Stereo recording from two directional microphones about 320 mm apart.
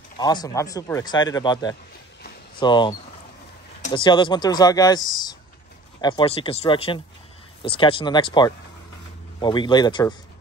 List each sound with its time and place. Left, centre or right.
0.2 s speech: centre